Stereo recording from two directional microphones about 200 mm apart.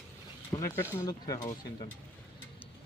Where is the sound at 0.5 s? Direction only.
20° left (ahead or behind).